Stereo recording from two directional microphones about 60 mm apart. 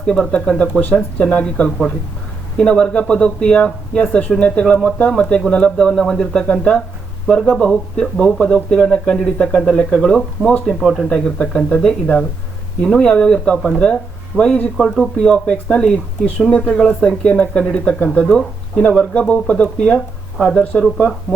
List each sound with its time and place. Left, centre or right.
0.0 s speech: centre
12.8 s speech: centre
14.8 s speech: centre
15.2 s speech: centre
17.2 s speech: left